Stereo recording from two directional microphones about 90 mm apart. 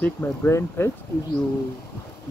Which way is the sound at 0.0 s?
25° left (ahead or behind).